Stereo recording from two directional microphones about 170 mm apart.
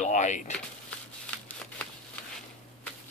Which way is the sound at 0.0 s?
45° left (ahead or behind).